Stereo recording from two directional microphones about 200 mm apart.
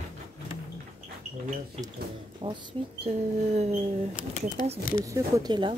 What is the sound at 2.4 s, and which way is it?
Speech, 25° right (ahead or behind).